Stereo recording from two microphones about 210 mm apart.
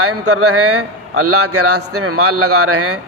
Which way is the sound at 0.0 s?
90° right.